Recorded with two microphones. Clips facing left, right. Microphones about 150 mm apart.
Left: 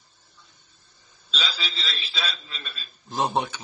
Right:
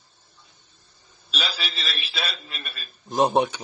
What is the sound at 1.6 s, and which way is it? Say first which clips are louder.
A man's voice: right 1 dB; 70° right (ahead or behind).